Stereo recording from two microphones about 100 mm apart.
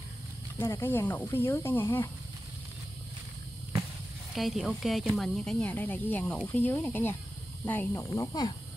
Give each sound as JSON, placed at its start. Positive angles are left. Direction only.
{"t": 0.6, "sound": "speech", "side_deg": 25}
{"t": 4.3, "sound": "speech", "side_deg": 0}
{"t": 8.3, "sound": "speech", "side_deg": 40}